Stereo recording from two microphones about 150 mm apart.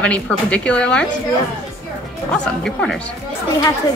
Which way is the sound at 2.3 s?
5° left (ahead or behind).